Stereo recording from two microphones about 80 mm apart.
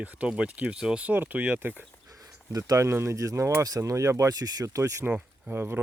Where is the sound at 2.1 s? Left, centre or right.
Right.